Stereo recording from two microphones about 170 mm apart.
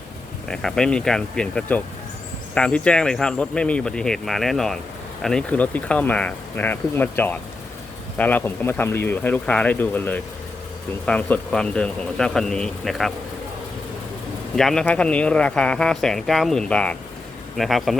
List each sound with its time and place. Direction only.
0.4 s speech: 5° left (ahead or behind)
14.5 s speech: centre (ahead or behind)